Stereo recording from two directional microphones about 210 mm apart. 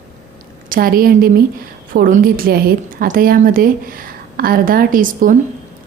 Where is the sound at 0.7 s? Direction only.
45° right (ahead or behind).